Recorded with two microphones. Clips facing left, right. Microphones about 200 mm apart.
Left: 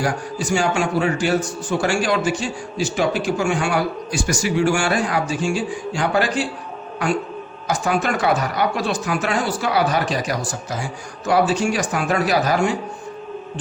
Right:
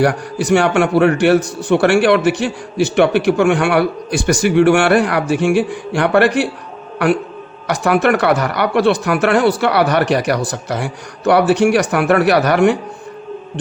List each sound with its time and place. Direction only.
0.0 s a man's voice: 65° right (ahead or behind)
7.7 s speech: 65° right (ahead or behind)